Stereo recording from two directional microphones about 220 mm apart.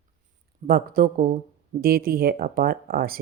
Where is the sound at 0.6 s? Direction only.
40° right (ahead or behind).